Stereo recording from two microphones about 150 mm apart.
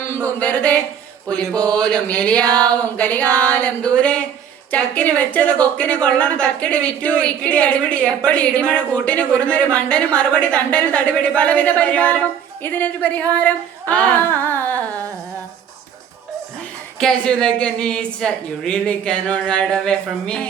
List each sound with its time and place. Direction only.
0.3 s a woman's voice: 10° left (ahead or behind)
12.6 s singing: 10° left (ahead or behind)
17.0 s a woman's voice: 5° left (ahead or behind)